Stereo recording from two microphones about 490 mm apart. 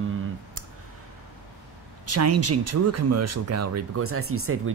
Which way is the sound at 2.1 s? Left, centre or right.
Right.